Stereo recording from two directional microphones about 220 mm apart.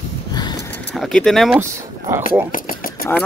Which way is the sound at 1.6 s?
10° right (ahead or behind).